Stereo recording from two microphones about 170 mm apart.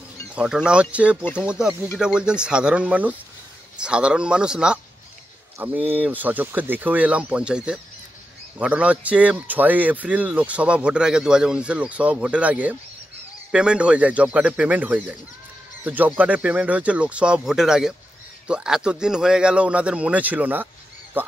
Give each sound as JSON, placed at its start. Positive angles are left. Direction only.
{"t": 0.3, "sound": "speech", "side_deg": -5}